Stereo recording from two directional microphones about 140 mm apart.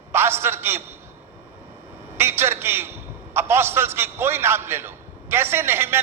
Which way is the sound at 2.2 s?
15° right (ahead or behind).